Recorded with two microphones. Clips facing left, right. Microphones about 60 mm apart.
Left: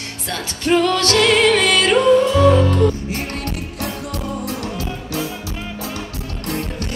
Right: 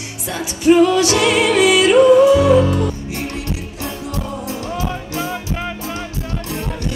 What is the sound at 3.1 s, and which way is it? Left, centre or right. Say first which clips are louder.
Music: right 1 dB; left.